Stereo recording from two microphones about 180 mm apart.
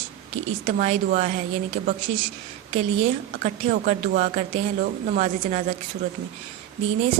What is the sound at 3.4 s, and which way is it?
A woman's voice, 45° right (ahead or behind).